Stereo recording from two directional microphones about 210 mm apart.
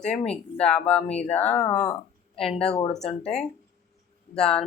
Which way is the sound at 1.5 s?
5° left (ahead or behind).